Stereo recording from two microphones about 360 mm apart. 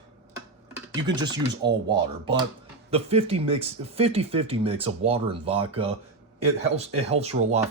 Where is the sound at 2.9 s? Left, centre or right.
Centre.